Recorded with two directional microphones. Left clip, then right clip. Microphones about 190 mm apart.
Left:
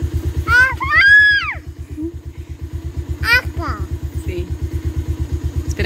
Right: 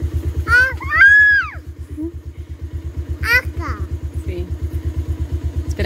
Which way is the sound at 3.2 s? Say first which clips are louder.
Left 1 dB; 10° left (ahead or behind).